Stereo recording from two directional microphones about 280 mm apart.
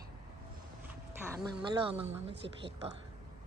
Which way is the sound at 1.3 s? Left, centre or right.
Centre.